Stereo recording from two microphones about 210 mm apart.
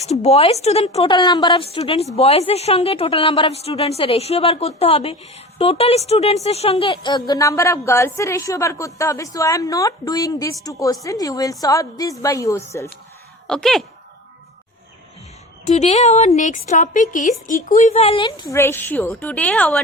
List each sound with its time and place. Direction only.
0.0 s a woman's voice: 30° left (ahead or behind); by 12.6 s 15° left (ahead or behind)
13.5 s speech: centre (ahead or behind)
15.6 s a woman's voice: 30° left (ahead or behind); by 19.8 s 5° left (ahead or behind)